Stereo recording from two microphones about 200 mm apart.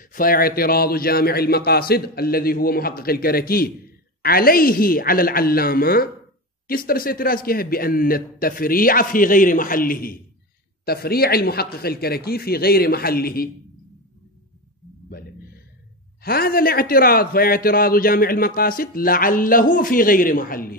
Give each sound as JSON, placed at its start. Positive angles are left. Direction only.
{"t": 0.0, "sound": "a man's voice", "side_deg": 45}
{"t": 16.2, "sound": "a man's voice", "side_deg": 50}